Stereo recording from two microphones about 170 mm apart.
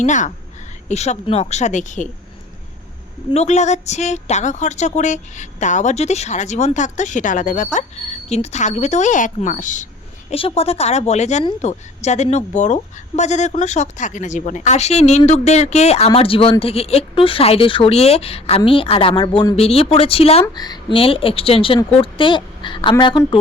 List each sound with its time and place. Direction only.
0.0 s a woman's voice: 45° left (ahead or behind)
3.3 s a woman's voice: 45° left (ahead or behind)
10.2 s a woman's voice: 35° left (ahead or behind)
20.4 s speech: 25° left (ahead or behind)